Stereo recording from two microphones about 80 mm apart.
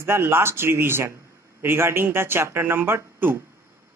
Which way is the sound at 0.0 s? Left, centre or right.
Right.